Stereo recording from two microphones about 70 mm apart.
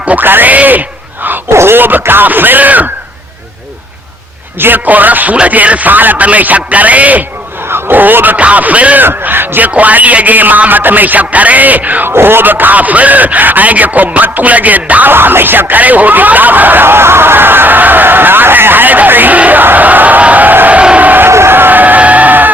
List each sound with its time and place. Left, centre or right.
0.0 s a man's voice: right
4.6 s a man's voice: right
9.0 s a man's voice: right
21.2 s a sound: right